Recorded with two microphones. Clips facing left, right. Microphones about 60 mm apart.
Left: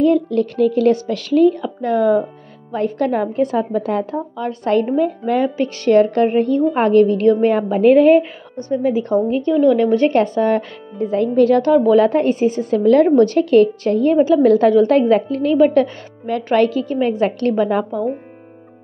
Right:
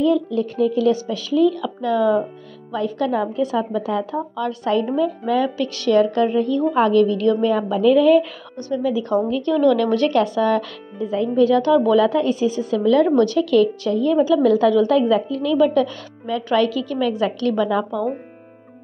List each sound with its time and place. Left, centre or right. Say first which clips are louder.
0.0 s a woman's voice: left 3 dB; left
1.5 s a woman's voice: left 2 dB; left
9.3 s speech: left 3 dB; left
11.1 s a woman's voice: left 3 dB; left